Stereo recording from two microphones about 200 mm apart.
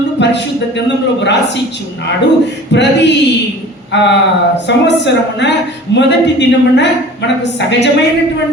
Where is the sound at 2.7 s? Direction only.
60° left (ahead or behind).